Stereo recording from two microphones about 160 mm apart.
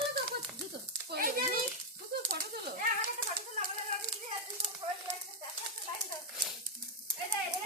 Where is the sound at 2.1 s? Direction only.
90° right.